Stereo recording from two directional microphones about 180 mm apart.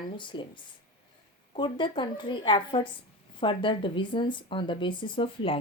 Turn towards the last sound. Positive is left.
turn(degrees=30)  # may be behind; listen again after turning